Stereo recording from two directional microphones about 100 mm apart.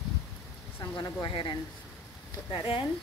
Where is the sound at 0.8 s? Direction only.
40° left (ahead or behind).